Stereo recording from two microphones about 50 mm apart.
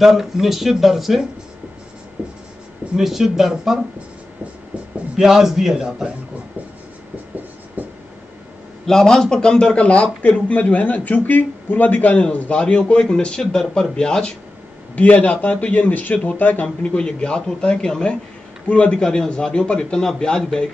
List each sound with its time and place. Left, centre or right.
0.0 s speech: centre
3.0 s a man's voice: centre
5.1 s a man's voice: centre
7.8 s writing: right
8.8 s a man's voice: centre
15.0 s a man's voice: left
15.9 s a man's voice: left
16.6 s a man's voice: centre